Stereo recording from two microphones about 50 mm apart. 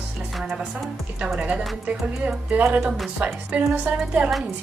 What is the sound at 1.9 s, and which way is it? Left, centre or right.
Speech, right.